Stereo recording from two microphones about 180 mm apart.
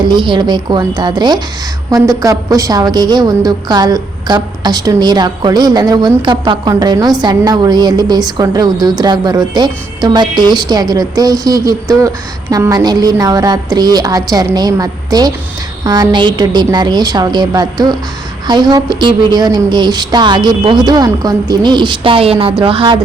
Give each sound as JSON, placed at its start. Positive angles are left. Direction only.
{"t": 0.0, "sound": "a woman's voice", "side_deg": -25}